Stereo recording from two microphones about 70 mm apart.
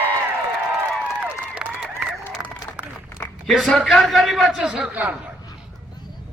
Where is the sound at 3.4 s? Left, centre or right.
Centre.